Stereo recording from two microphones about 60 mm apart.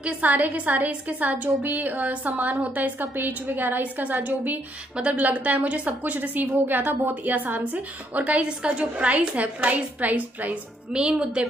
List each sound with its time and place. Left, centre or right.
0.0 s a woman's voice: right